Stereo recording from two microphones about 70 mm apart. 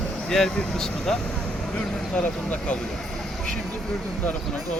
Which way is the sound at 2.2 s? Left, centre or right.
Centre.